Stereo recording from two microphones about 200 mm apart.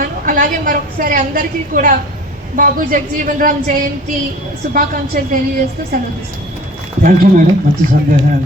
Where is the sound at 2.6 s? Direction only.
40° right (ahead or behind).